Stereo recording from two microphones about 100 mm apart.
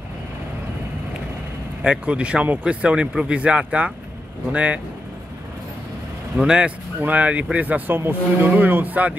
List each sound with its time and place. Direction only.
1.8 s speech: 10° right (ahead or behind)
6.3 s speech: 5° right (ahead or behind)